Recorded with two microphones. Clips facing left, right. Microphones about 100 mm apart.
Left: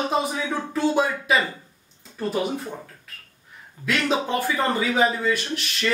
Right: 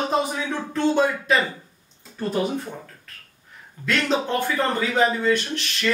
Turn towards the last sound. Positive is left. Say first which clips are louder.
# right 1 dB
turn(degrees=5)  # may be behind; listen again after turning